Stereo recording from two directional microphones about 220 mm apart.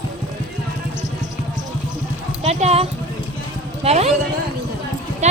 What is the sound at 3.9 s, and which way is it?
Speech, 30° right (ahead or behind).